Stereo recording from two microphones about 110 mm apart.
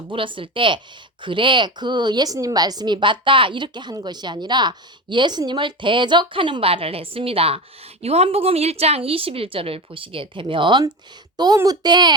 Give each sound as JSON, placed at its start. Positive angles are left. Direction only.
{"t": 0.1, "sound": "a woman's voice", "side_deg": -50}